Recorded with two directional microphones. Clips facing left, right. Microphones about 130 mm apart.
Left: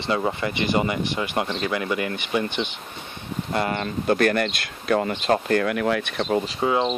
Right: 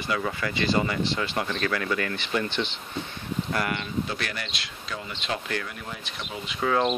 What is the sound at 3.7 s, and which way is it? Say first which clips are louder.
Speech: left 7 dB; 45° left (ahead or behind).